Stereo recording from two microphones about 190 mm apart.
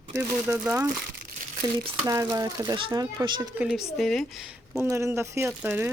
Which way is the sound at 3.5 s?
Centre (ahead or behind).